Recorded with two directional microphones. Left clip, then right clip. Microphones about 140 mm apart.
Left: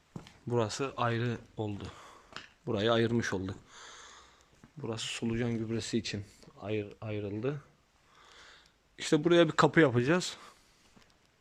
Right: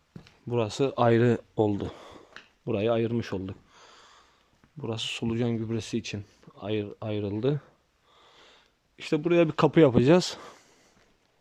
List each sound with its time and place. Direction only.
0.4 s speech: 15° right (ahead or behind)
0.7 s speech: 30° right (ahead or behind)
2.6 s a sound: 15° right (ahead or behind)
4.8 s speech: 20° right (ahead or behind)
8.2 s a sound: 20° right (ahead or behind)
9.0 s speech: 5° right (ahead or behind); by 10.6 s 45° right (ahead or behind)